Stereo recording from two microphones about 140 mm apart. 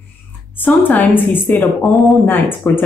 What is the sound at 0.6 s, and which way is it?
Speech, 10° left (ahead or behind).